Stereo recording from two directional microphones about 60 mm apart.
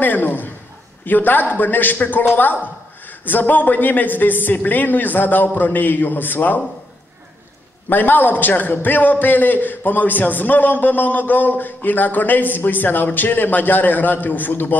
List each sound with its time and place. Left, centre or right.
0.0 s a man's voice: left
7.9 s a man's voice: left